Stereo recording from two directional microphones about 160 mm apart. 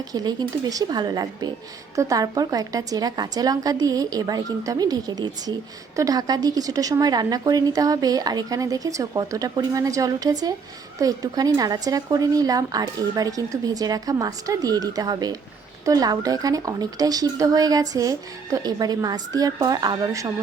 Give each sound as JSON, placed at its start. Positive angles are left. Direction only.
{"t": 0.0, "sound": "speech", "side_deg": -25}